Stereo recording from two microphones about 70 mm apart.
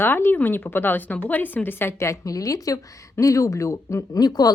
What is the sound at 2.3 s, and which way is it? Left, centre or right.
Speech, left.